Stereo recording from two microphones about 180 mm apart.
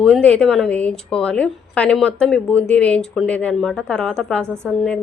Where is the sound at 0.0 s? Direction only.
5° left (ahead or behind).